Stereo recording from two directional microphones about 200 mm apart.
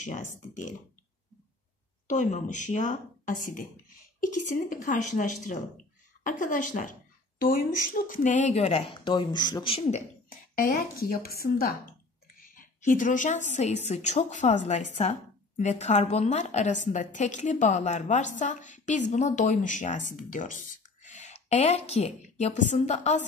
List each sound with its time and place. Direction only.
0.0 s a woman's voice: 40° left (ahead or behind)
2.0 s a woman's voice: 40° left (ahead or behind)
10.6 s a woman's voice: 45° left (ahead or behind)